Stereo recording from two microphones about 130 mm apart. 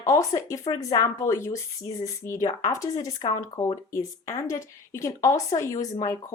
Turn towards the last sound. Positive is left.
turn(degrees=25)  # may be behind; listen again after turning